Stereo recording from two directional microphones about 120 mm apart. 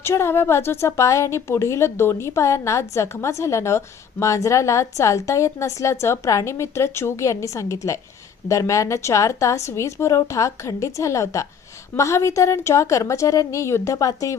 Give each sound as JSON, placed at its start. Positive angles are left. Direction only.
{"t": 0.0, "sound": "a woman's voice", "side_deg": 20}